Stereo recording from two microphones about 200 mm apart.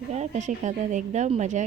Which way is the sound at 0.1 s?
35° right (ahead or behind).